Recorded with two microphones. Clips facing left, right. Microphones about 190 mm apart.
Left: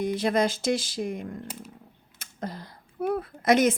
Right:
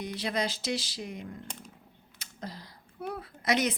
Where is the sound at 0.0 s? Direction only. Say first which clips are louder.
Left 8 dB; 50° left (ahead or behind).